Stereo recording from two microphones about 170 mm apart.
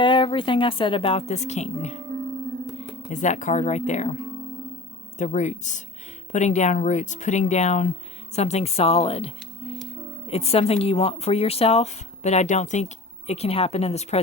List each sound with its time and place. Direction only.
0.0 s speech: 30° left (ahead or behind)
3.1 s speech: 45° left (ahead or behind)